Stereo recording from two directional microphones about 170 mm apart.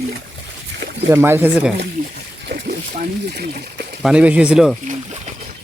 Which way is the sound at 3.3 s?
70° right (ahead or behind).